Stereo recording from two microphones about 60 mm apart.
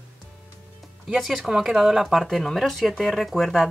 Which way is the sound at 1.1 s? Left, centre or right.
Centre.